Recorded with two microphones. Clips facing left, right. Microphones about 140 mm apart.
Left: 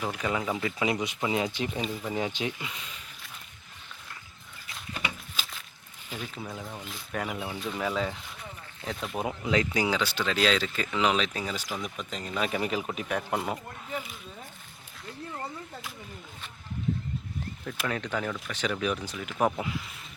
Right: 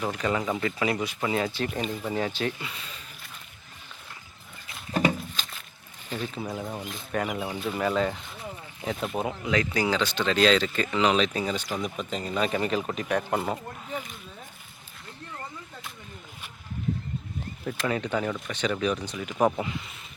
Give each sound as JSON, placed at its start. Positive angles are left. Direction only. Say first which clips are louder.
{"t": 0.0, "sound": "speech", "louder": "right 3 dB", "side_deg": 5}
{"t": 0.8, "sound": "speech", "louder": "right 1 dB", "side_deg": 20}
{"t": 5.4, "sound": "a sound", "louder": "right 1 dB", "side_deg": 5}
{"t": 6.1, "sound": "speech", "louder": "right 6 dB", "side_deg": 10}
{"t": 6.4, "sound": "speech", "louder": "right 5 dB", "side_deg": -20}
{"t": 7.1, "sound": "speech", "louder": "right 4 dB", "side_deg": 0}
{"t": 9.5, "sound": "speech", "louder": "even", "side_deg": 25}
{"t": 9.8, "sound": "speech", "louder": "right 2 dB", "side_deg": 10}
{"t": 17.8, "sound": "speech", "louder": "right 4 dB", "side_deg": -5}